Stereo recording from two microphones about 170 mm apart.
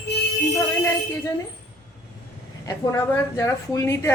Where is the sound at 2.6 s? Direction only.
20° left (ahead or behind).